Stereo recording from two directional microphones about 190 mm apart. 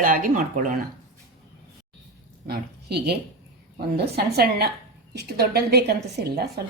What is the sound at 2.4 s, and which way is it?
A woman's voice, 55° right (ahead or behind).